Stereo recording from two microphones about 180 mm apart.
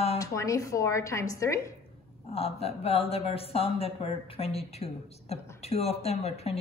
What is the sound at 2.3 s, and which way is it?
A woman's voice, 35° left (ahead or behind).